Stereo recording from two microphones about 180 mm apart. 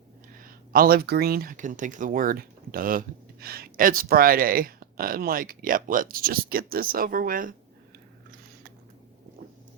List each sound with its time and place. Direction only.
0.3 s speech: 50° right (ahead or behind)